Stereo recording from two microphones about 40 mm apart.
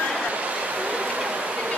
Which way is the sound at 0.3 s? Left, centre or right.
Right.